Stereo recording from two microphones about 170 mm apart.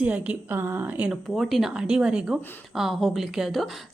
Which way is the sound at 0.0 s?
10° right (ahead or behind).